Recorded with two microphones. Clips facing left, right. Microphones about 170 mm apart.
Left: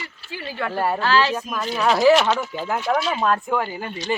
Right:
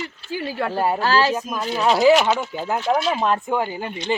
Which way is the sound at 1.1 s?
40° right (ahead or behind).